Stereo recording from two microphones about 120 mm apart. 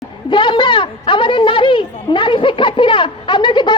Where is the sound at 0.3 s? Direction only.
40° left (ahead or behind).